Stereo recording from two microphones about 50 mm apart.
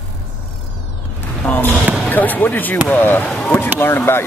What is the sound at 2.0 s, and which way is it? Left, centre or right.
Speech, left.